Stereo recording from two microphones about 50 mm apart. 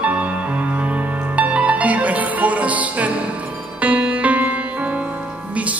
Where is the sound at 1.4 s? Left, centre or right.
Right.